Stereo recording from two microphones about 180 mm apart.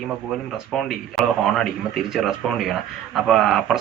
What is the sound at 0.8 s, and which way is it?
A man's voice, centre (ahead or behind).